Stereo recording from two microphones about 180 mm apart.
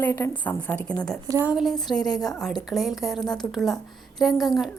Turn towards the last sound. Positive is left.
turn(degrees=0)  # may be behind; listen again after turning